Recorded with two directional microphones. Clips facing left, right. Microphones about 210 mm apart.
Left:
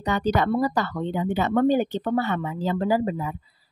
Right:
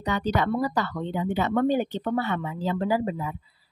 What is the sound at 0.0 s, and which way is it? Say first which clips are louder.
A woman's voice: left 3 dB; 40° left (ahead or behind).